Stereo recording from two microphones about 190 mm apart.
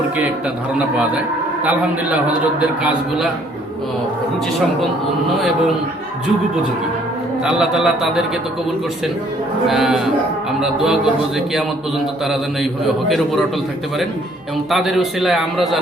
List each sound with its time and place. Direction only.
7.4 s a man's voice: centre (ahead or behind)
9.6 s a man's voice: centre (ahead or behind)
13.1 s a man's voice: centre (ahead or behind)
14.7 s a man's voice: centre (ahead or behind)